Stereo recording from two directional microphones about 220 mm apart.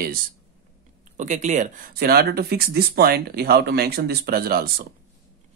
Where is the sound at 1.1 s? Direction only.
35° right (ahead or behind).